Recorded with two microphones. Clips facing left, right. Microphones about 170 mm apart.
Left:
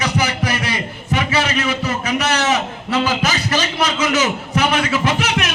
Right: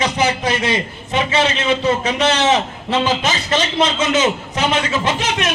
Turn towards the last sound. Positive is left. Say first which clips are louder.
# even
turn(degrees=-25)  # may be behind; listen again after turning